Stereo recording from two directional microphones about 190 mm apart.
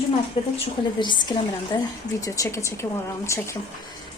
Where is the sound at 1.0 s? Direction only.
25° left (ahead or behind).